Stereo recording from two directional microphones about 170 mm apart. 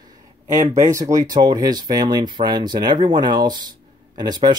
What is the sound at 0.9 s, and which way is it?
Speech, 20° right (ahead or behind).